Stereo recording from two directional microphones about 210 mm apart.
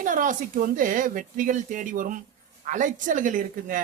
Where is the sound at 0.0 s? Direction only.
40° right (ahead or behind).